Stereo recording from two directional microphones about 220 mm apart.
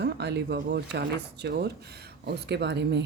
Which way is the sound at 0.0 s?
50° right (ahead or behind).